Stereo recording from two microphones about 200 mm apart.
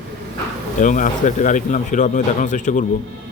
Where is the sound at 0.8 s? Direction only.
40° left (ahead or behind).